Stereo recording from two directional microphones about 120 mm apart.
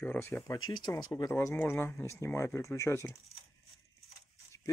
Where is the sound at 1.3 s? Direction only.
20° left (ahead or behind).